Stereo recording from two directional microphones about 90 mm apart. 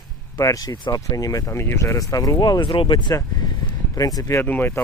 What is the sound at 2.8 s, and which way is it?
Speech, 60° left (ahead or behind).